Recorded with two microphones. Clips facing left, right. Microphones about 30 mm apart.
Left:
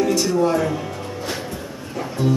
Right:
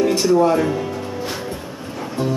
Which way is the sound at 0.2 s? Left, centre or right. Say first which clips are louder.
Right 3 dB; right.